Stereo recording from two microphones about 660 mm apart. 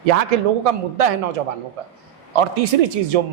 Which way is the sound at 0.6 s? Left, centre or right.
Right.